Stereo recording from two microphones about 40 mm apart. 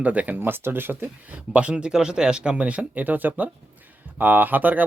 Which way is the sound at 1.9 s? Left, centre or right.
Centre.